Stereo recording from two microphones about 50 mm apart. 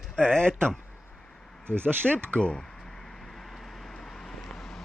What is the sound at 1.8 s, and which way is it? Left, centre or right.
Speech, right.